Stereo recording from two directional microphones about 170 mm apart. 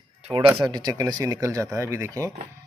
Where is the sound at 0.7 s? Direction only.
25° right (ahead or behind).